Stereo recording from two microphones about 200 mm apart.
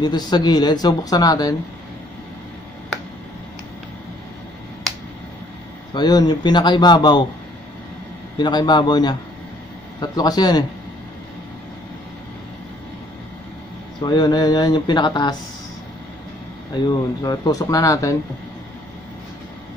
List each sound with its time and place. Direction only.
0.0 s speech: 20° left (ahead or behind)
5.9 s speech: 20° left (ahead or behind)
8.4 s speech: 20° left (ahead or behind)
14.0 s speech: 20° left (ahead or behind)
16.7 s speech: 20° left (ahead or behind)